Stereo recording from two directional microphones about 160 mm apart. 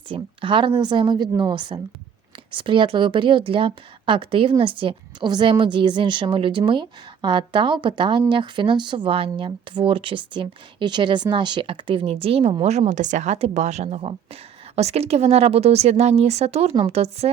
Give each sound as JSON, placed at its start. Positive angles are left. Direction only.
{"t": 0.1, "sound": "a woman's voice", "side_deg": -30}